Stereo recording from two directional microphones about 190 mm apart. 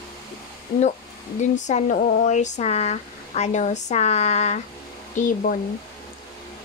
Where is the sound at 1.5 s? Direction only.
40° left (ahead or behind).